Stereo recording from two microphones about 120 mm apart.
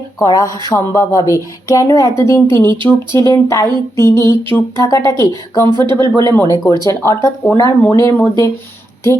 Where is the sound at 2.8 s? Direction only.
40° right (ahead or behind).